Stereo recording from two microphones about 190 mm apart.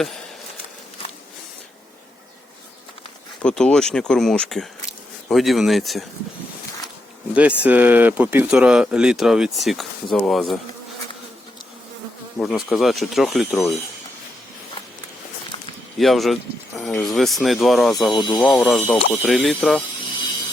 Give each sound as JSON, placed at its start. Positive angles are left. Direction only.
{"t": 3.4, "sound": "speech", "side_deg": 5}
{"t": 7.3, "sound": "speech", "side_deg": -5}
{"t": 12.4, "sound": "speech", "side_deg": 0}
{"t": 16.0, "sound": "speech", "side_deg": 0}
{"t": 18.1, "sound": "speech", "side_deg": 25}
{"t": 18.3, "sound": "speech", "side_deg": 0}